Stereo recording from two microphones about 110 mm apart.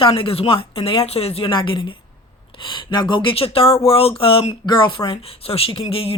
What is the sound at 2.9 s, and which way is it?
Speech, 45° left (ahead or behind).